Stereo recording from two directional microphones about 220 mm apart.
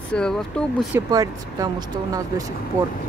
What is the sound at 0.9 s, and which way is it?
Speech, 15° right (ahead or behind).